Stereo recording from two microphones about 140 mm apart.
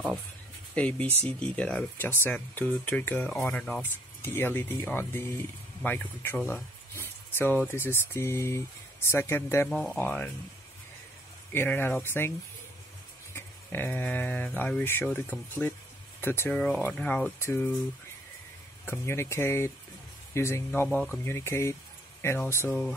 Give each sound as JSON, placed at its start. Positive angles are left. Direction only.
{"t": 0.7, "sound": "speech", "side_deg": 10}
{"t": 9.7, "sound": "speech", "side_deg": 0}
{"t": 9.9, "sound": "speech", "side_deg": 10}
{"t": 11.5, "sound": "speech", "side_deg": 15}
{"t": 13.3, "sound": "speech", "side_deg": 15}
{"t": 18.9, "sound": "speech", "side_deg": 20}